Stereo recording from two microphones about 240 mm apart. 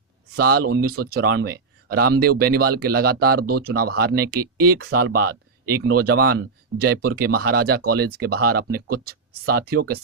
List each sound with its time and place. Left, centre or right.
0.3 s speech: right